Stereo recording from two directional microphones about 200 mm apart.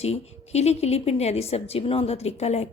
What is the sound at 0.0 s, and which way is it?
A woman's voice, 35° left (ahead or behind).